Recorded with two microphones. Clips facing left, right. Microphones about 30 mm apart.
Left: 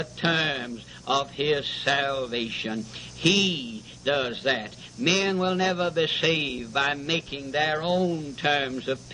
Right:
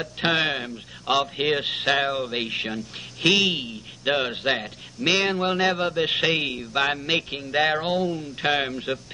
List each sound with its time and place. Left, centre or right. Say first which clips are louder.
0.0 s a man's voice: right 2 dB; centre